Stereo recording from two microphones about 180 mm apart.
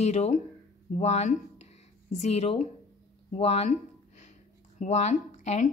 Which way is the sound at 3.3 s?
35° left (ahead or behind).